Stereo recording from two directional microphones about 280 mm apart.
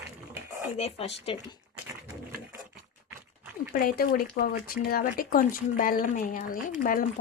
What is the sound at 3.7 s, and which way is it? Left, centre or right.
Speech, left.